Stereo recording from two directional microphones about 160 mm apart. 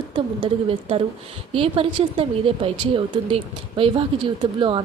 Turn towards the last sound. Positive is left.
turn(degrees=-30)  # may be behind; listen again after turning